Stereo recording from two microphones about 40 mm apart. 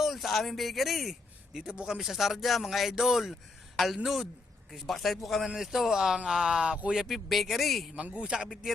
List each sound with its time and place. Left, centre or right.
0.0 s speech: centre
1.5 s speech: centre
8.1 s speech: centre